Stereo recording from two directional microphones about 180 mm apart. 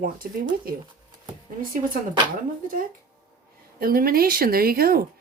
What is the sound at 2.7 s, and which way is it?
Speech, 50° right (ahead or behind).